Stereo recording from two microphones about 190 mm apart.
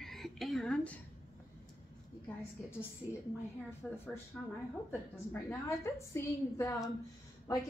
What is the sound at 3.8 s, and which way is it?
Speech, centre (ahead or behind).